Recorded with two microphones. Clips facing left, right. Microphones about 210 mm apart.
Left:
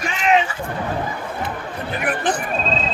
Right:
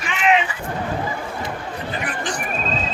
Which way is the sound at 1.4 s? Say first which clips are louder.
Left 1 dB; 55° left (ahead or behind).